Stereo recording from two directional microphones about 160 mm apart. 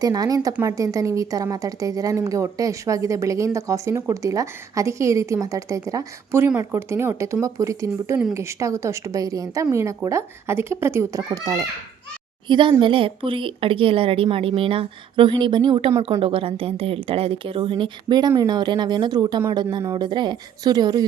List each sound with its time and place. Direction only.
0.0 s a woman's voice: 25° right (ahead or behind)